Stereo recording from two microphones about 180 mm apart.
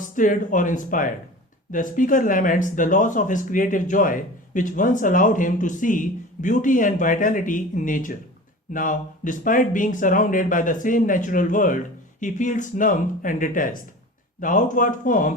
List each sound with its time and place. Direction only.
0.2 s speech: 45° left (ahead or behind)